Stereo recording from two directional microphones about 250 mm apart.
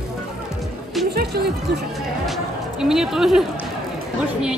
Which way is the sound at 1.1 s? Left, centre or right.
Right.